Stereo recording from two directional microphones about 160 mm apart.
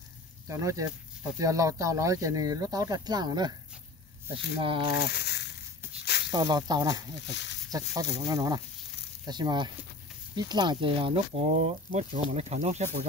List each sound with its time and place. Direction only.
0.5 s speech: 20° right (ahead or behind)
4.6 s speech: 30° right (ahead or behind)
5.1 s a sound: 90° left
6.0 s snake: 90° left
6.3 s speech: 25° right (ahead or behind)
7.2 s speech: 90° left
7.7 s speech: 25° right (ahead or behind); by 13.0 s 45° right (ahead or behind)